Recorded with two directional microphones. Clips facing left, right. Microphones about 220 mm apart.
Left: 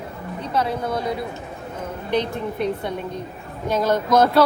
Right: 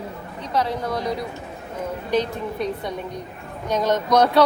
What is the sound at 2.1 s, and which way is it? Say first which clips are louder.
Speech: left 1 dB; 20° left (ahead or behind).